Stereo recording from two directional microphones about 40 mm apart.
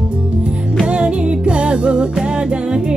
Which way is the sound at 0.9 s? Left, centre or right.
Right.